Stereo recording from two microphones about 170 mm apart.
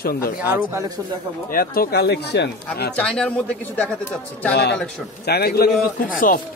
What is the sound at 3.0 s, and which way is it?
A man's voice, 5° left (ahead or behind).